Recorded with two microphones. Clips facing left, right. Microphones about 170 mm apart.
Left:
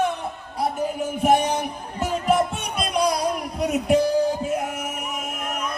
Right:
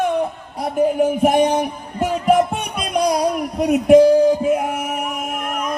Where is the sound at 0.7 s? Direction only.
55° right (ahead or behind).